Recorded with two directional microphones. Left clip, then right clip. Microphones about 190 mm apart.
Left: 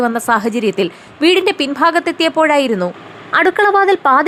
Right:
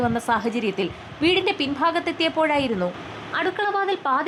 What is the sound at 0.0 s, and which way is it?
A woman's voice, 25° left (ahead or behind).